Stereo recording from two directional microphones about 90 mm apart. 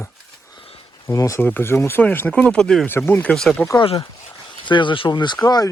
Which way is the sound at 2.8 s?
25° left (ahead or behind).